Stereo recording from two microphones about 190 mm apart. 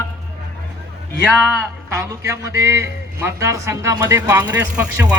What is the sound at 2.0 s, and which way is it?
A man's voice, 15° right (ahead or behind).